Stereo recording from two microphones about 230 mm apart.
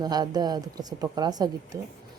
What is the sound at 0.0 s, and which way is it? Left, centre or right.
Speech, centre.